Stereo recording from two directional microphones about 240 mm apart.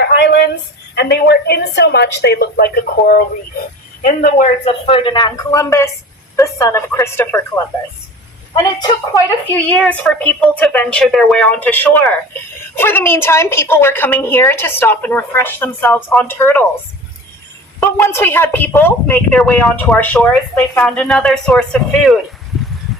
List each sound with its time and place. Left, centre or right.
0.2 s a woman's voice: left; by 16.6 s centre
17.7 s a woman's voice: centre